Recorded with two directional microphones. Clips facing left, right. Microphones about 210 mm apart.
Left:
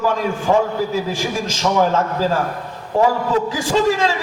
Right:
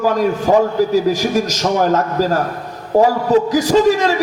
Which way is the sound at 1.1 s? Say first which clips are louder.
Right 6 dB; 40° right (ahead or behind).